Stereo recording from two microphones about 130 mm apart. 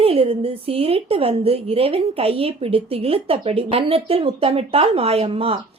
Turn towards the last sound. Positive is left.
turn(degrees=-50)  # may be behind; listen again after turning